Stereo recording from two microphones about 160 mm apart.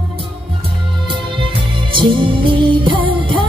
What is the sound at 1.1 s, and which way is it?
Music, 30° right (ahead or behind).